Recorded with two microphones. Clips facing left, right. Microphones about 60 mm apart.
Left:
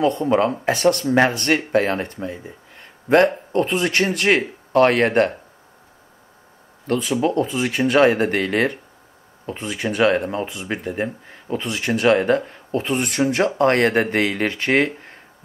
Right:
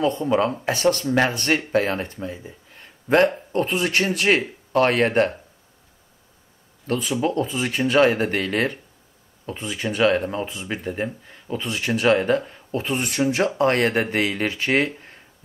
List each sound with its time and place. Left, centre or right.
0.2 s speech: left
0.7 s speech: left
1.0 s speech: left
2.3 s a sound: left
3.5 s speech: left
7.2 s speech: left
11.9 s speech: left